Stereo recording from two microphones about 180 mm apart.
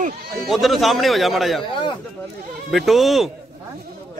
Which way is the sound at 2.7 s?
Centre (ahead or behind).